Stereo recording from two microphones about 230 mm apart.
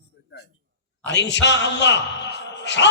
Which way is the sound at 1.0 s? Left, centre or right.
Left.